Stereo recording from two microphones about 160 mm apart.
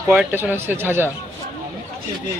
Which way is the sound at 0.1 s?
10° right (ahead or behind).